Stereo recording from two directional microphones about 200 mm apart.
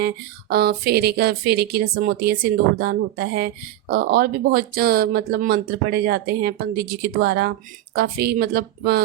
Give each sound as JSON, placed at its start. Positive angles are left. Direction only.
{"t": 0.5, "sound": "a woman's voice", "side_deg": -50}